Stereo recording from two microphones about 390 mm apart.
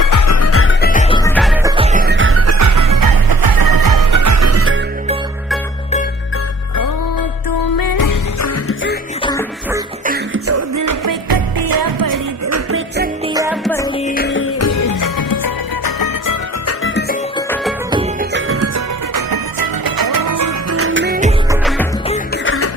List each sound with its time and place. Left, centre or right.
0.0 s music: left; by 1.7 s centre
1.8 s music: centre; by 4.7 s right
7.7 s music: left
10.5 s music: right
12.4 s music: right
13.3 s music: centre
14.0 s music: left
16.6 s music: left
18.3 s music: right
19.1 s music: right
21.5 s music: centre
22.4 s music: left